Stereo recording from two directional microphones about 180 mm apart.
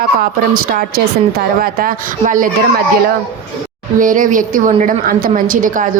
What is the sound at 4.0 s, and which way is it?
A woman's voice, 50° right (ahead or behind).